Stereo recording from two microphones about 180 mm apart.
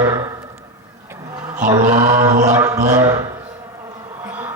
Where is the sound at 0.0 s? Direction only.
20° right (ahead or behind).